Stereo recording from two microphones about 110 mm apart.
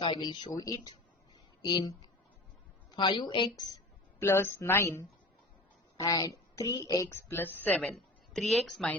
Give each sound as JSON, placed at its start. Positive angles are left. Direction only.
{"t": 0.0, "sound": "a woman's voice", "side_deg": 45}
{"t": 0.5, "sound": "a woman's voice", "side_deg": 35}
{"t": 2.9, "sound": "a woman's voice", "side_deg": 45}
{"t": 3.5, "sound": "speech", "side_deg": 35}
{"t": 4.2, "sound": "a woman's voice", "side_deg": 20}
{"t": 7.1, "sound": "a woman's voice", "side_deg": 20}
{"t": 7.9, "sound": "a woman's voice", "side_deg": 5}